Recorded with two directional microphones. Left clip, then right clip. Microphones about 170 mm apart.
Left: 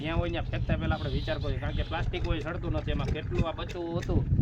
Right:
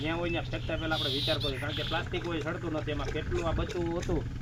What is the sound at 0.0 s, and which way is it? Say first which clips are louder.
Speech: even; 15° left (ahead or behind).